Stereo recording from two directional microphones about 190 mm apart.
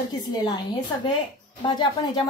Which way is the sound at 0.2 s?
25° left (ahead or behind).